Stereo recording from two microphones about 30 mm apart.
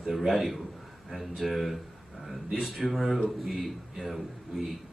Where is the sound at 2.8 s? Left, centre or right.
Centre.